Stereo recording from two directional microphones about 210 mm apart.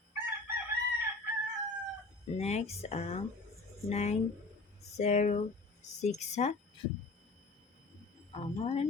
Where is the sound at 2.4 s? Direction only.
30° left (ahead or behind).